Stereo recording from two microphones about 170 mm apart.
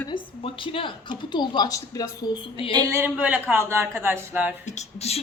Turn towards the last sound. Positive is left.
turn(degrees=40)  # may be behind; listen again after turning